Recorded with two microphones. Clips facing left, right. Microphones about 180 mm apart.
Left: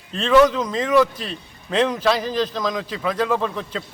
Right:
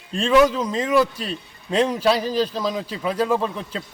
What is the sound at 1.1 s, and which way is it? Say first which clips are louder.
A man's voice: right 2 dB; 35° right (ahead or behind).